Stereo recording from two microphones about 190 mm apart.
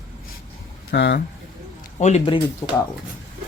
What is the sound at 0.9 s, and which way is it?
Speech, 60° left (ahead or behind).